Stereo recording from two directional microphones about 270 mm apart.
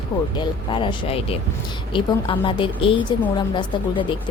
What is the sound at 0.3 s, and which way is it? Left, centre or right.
A woman's voice, centre.